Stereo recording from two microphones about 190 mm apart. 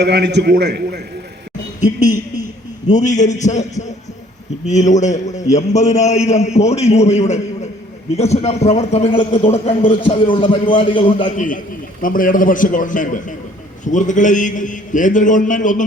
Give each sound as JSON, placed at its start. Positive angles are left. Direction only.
{"t": 0.0, "sound": "a man's voice", "side_deg": -60}
{"t": 2.8, "sound": "a man's voice", "side_deg": 40}
{"t": 11.3, "sound": "a man's voice", "side_deg": 45}